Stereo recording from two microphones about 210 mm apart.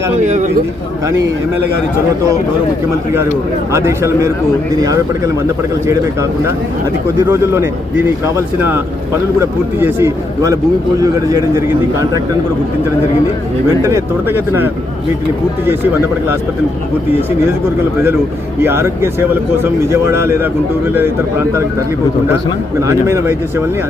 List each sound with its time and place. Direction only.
0.3 s speech: 35° right (ahead or behind)
3.7 s speech: 15° right (ahead or behind)
7.3 s speech: 10° right (ahead or behind)
13.8 s speech: 10° right (ahead or behind)
18.6 s speech: 10° right (ahead or behind)
22.8 s speech: 15° right (ahead or behind)